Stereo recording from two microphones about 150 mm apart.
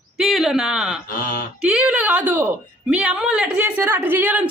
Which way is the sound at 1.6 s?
5° right (ahead or behind).